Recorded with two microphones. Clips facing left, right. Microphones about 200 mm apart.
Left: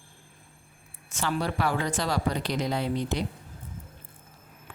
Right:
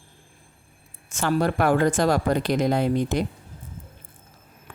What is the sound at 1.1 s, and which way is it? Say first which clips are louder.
Speech: right 6 dB; 50° right (ahead or behind).